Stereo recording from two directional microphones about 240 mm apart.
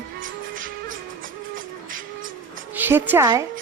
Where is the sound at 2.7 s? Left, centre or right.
Centre.